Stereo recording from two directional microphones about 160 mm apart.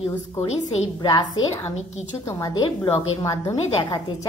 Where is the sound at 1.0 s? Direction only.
30° left (ahead or behind).